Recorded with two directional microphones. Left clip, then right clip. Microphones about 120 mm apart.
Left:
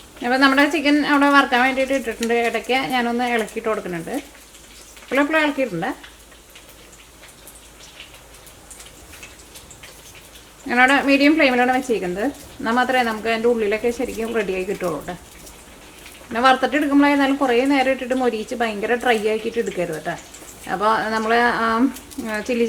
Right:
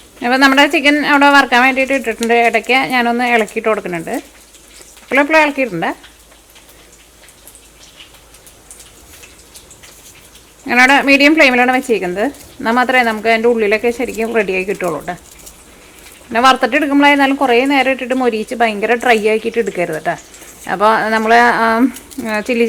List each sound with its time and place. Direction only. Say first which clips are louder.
0.2 s speech: right 6 dB; 25° right (ahead or behind)
10.7 s speech: right 6 dB; 30° right (ahead or behind)
16.3 s speech: right 6 dB; 25° right (ahead or behind)